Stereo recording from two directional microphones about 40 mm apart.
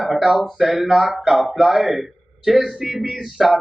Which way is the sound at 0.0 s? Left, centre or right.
Centre.